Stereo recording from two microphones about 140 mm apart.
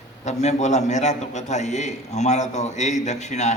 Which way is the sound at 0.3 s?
55° left (ahead or behind).